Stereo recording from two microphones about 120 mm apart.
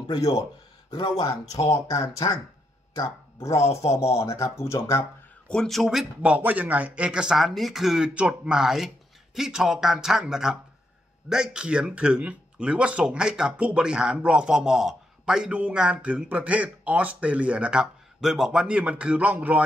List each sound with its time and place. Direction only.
0.1 s a man's voice: 30° left (ahead or behind)
5.5 s speech: 5° left (ahead or behind); by 19.6 s 15° right (ahead or behind)